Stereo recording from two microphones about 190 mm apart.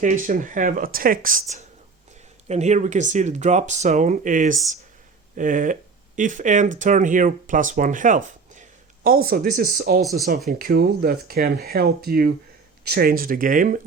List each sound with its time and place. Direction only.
0.0 s speech: 45° right (ahead or behind)
10.0 s speech: centre (ahead or behind)
10.6 s speech: 55° right (ahead or behind)